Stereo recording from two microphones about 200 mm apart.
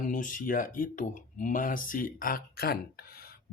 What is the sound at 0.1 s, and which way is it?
Speech, 40° left (ahead or behind).